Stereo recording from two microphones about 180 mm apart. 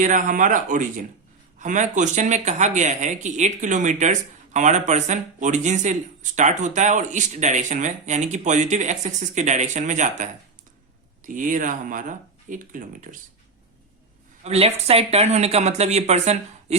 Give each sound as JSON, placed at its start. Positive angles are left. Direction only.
{"t": 0.0, "sound": "speech", "side_deg": -45}
{"t": 14.4, "sound": "speech", "side_deg": -35}